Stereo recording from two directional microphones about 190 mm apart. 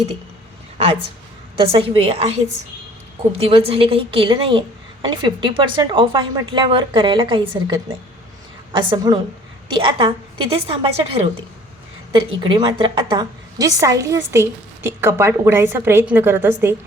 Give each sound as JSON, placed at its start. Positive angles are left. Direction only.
{"t": 1.5, "sound": "speech", "side_deg": -30}
{"t": 3.3, "sound": "speech", "side_deg": -30}
{"t": 12.4, "sound": "a woman's voice", "side_deg": -25}